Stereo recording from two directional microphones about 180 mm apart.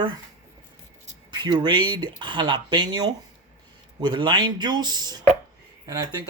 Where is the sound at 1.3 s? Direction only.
25° right (ahead or behind).